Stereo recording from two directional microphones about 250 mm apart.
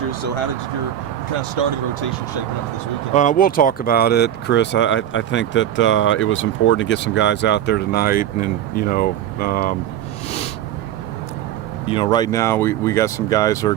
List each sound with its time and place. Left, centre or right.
3.1 s speech: left
11.9 s speech: centre